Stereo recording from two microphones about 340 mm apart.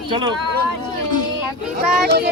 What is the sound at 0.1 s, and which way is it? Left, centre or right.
Speech, centre.